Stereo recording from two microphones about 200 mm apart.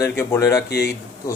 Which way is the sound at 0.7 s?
55° left (ahead or behind).